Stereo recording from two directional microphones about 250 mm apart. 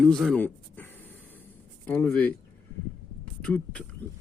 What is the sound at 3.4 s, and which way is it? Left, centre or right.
Speech, centre.